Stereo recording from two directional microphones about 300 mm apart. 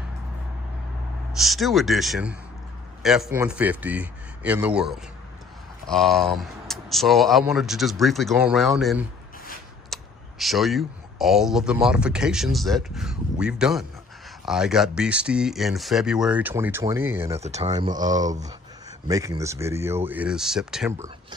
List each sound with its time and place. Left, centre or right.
1.4 s speech: centre
9.9 s a sound: centre
10.4 s speech: centre
17.4 s speech: right
19.0 s speech: centre